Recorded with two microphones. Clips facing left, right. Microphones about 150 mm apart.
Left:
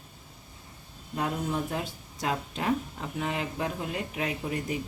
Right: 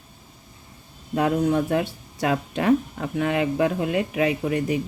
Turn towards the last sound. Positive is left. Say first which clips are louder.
# right 8 dB
turn(degrees=-75)  # may be behind; listen again after turning